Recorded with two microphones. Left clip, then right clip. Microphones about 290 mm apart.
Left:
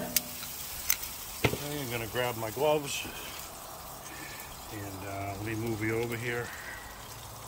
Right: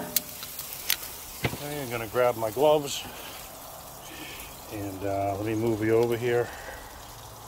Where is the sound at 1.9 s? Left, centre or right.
Right.